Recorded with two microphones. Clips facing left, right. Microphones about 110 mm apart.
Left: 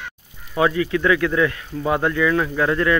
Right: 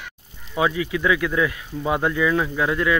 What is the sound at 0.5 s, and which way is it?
Speech, 10° right (ahead or behind).